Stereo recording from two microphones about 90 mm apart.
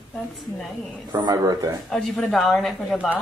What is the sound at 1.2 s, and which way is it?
Speech, 40° right (ahead or behind).